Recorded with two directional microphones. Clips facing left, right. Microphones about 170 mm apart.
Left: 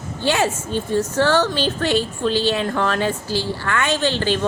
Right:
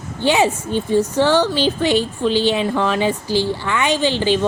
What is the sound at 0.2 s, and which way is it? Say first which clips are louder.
A woman's voice: right 4 dB; 15° right (ahead or behind).